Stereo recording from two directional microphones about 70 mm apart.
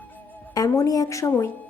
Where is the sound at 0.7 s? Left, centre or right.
Left.